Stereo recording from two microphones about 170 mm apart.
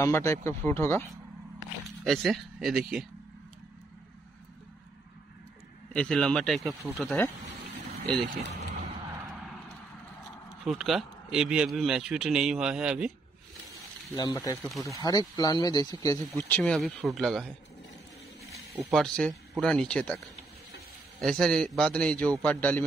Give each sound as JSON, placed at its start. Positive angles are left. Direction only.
{"t": 0.0, "sound": "speech", "side_deg": 20}
{"t": 2.0, "sound": "a man's voice", "side_deg": 0}
{"t": 5.9, "sound": "a man's voice", "side_deg": 5}
{"t": 6.8, "sound": "speech", "side_deg": -10}
{"t": 8.3, "sound": "vehicle", "side_deg": -45}
{"t": 9.2, "sound": "horse", "side_deg": 0}
{"t": 10.6, "sound": "a man's voice", "side_deg": 0}
{"t": 14.1, "sound": "speech", "side_deg": 20}
{"t": 14.6, "sound": "a man's voice", "side_deg": 0}
{"t": 15.0, "sound": "speech", "side_deg": 20}
{"t": 16.3, "sound": "a man's voice", "side_deg": 10}
{"t": 18.9, "sound": "a man's voice", "side_deg": 0}
{"t": 21.2, "sound": "a man's voice", "side_deg": 5}